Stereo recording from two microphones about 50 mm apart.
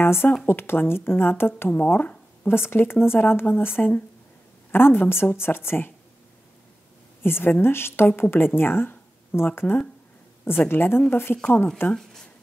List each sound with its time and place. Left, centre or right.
0.0 s speech: left
1.7 s speech: left
2.4 s speech: left
7.2 s speech: left
11.4 s speech: centre